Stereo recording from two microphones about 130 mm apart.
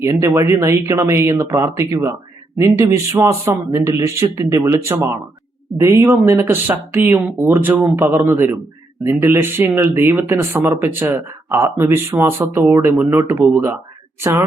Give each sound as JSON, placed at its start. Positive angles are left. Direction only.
{"t": 0.0, "sound": "speech", "side_deg": -20}